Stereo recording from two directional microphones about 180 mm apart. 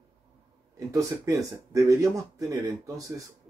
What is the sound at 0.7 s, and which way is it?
Speech, 15° right (ahead or behind).